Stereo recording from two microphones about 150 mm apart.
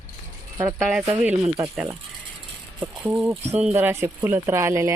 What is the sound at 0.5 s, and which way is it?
Speech, 15° right (ahead or behind).